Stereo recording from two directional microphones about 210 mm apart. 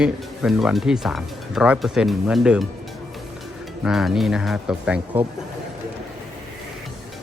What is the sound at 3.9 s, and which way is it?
Speech, centre (ahead or behind).